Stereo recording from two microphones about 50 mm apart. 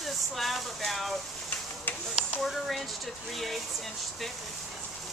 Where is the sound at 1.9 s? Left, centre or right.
Left.